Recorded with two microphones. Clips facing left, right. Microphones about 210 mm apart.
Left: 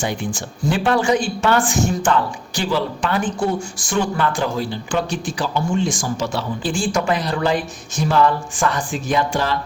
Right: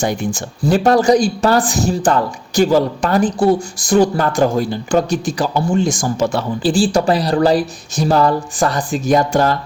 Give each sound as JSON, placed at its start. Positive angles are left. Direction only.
{"t": 0.0, "sound": "speech", "side_deg": -45}
{"t": 6.6, "sound": "speech", "side_deg": -35}